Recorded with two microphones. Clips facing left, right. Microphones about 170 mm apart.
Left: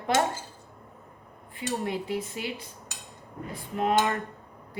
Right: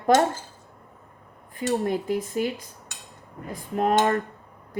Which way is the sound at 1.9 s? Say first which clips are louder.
Right 5 dB; 45° right (ahead or behind).